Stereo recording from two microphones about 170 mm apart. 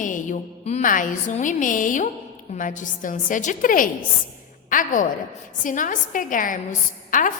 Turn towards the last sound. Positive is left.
turn(degrees=50)  # may be behind; listen again after turning